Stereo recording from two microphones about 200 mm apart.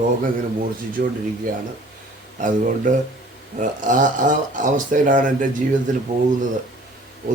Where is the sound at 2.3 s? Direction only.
40° right (ahead or behind).